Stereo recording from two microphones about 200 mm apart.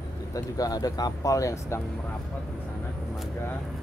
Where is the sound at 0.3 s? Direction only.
20° left (ahead or behind).